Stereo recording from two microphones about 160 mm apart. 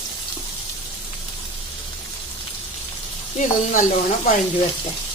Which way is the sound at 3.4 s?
55° left (ahead or behind).